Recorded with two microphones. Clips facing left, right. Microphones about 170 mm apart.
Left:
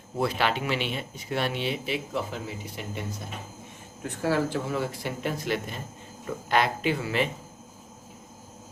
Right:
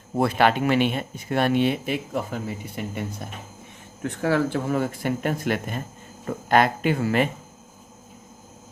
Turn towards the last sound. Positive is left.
turn(degrees=-50)  # may be behind; listen again after turning